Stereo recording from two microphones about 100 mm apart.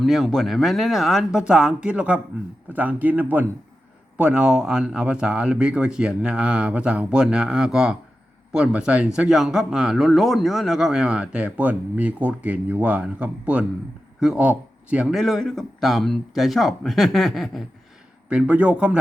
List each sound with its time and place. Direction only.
0.0 s a man's voice: centre (ahead or behind)
15.1 s speech: centre (ahead or behind)
18.3 s speech: 10° right (ahead or behind)